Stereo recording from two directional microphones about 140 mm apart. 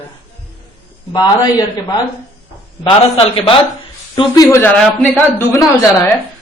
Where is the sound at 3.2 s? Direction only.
40° left (ahead or behind).